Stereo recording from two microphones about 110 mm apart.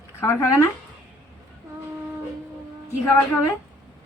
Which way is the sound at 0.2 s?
25° left (ahead or behind).